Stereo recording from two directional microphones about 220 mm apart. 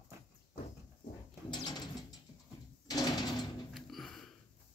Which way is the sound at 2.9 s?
20° left (ahead or behind).